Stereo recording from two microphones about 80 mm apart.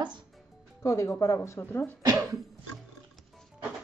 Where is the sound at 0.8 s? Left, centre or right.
Left.